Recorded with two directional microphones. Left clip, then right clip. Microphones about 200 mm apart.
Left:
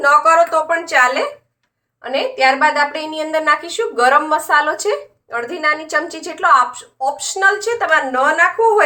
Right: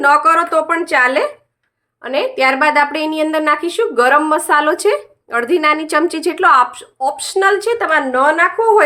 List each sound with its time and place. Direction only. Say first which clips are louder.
0.0 s a woman's voice: even; 55° right (ahead or behind); by 8.8 s 35° right (ahead or behind)